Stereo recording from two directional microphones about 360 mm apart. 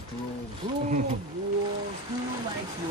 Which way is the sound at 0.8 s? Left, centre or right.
Right.